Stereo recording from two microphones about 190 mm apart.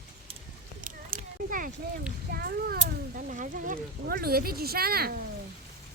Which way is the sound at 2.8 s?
40° right (ahead or behind).